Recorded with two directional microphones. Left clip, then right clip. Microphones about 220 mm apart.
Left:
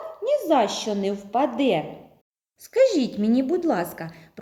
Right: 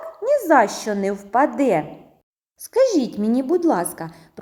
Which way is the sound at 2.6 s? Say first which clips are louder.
Right 2 dB; 20° right (ahead or behind).